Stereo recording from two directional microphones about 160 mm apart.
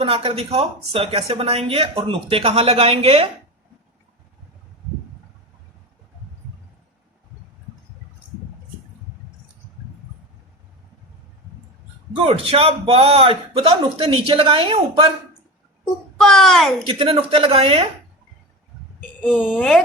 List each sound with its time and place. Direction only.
0.0 s speech: 35° right (ahead or behind)
12.1 s speech: 40° right (ahead or behind)
15.8 s a child's voice: 5° left (ahead or behind)
16.8 s speech: 30° right (ahead or behind)
19.2 s speech: 5° right (ahead or behind)